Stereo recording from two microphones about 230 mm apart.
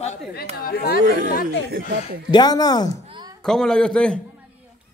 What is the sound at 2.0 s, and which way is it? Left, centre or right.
Speech, centre.